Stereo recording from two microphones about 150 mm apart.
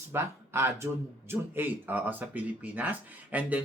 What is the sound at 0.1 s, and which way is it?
Speech, 15° right (ahead or behind).